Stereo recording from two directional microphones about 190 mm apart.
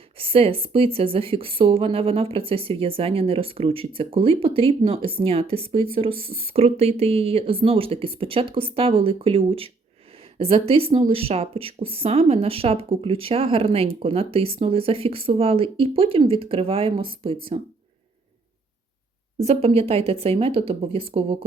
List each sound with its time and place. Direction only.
0.2 s a woman's voice: 30° right (ahead or behind)
19.5 s a woman's voice: 30° right (ahead or behind)